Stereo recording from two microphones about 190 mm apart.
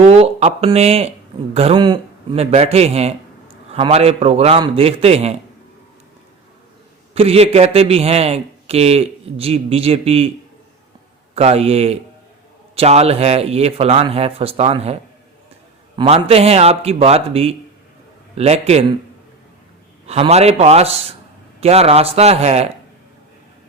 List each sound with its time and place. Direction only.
0.0 s a man's voice: 35° right (ahead or behind)
7.1 s a man's voice: 30° right (ahead or behind)
11.3 s a man's voice: 35° right (ahead or behind)
16.0 s a man's voice: 30° right (ahead or behind)
20.1 s a man's voice: 30° right (ahead or behind)